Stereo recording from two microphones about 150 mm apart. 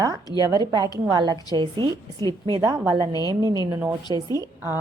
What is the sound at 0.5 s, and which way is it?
A woman's voice, 25° right (ahead or behind).